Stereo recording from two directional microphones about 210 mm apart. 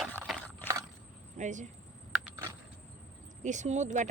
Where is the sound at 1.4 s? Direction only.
35° right (ahead or behind).